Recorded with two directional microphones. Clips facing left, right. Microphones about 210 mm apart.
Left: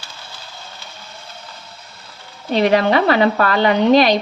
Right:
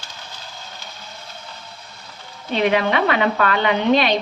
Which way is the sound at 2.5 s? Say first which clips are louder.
Left 4 dB; 40° left (ahead or behind).